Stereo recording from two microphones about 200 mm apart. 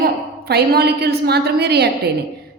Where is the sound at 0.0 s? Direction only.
50° right (ahead or behind).